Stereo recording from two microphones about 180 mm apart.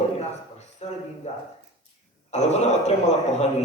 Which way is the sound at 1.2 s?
35° left (ahead or behind).